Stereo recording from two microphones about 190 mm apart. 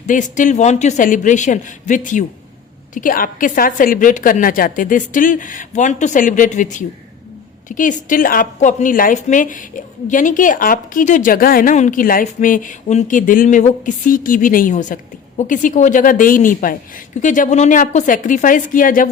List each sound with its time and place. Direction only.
0.1 s a man's voice: 40° left (ahead or behind)